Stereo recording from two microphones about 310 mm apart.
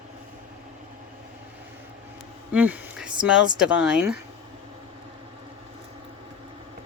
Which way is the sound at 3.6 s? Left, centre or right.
Centre.